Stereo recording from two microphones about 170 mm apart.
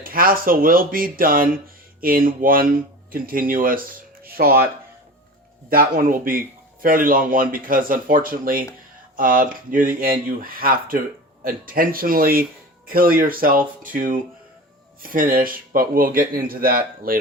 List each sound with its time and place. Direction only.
0.0 s speech: 55° right (ahead or behind)
5.7 s speech: 55° right (ahead or behind)